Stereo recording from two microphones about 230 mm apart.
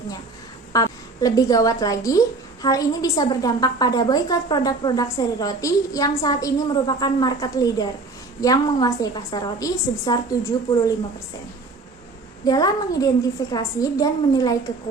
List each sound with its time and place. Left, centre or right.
0.7 s a woman's voice: centre
12.5 s a woman's voice: centre